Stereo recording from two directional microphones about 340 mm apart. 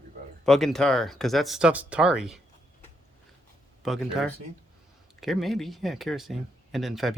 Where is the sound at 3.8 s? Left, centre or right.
Centre.